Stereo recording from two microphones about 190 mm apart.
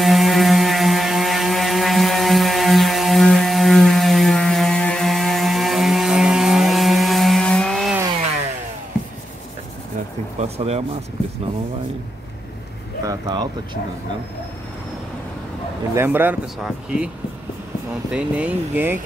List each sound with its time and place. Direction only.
0.0 s ratchet: centre (ahead or behind)
10.4 s a sound: 35° right (ahead or behind)
13.0 s speech: 20° right (ahead or behind)
15.9 s speech: 10° right (ahead or behind)
18.1 s speech: 10° right (ahead or behind)